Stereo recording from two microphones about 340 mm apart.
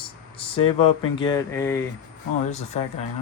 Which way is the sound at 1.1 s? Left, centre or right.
Centre.